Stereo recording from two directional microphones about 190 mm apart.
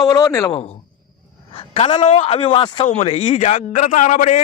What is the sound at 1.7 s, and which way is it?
A man's voice, 30° left (ahead or behind).